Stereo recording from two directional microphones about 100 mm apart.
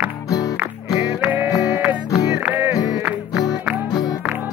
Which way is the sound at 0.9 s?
15° right (ahead or behind).